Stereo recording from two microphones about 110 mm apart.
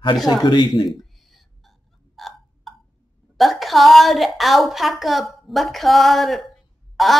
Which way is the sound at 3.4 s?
Centre (ahead or behind).